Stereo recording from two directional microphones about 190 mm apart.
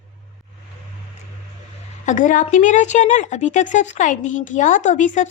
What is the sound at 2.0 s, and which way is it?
A woman's voice, 40° left (ahead or behind).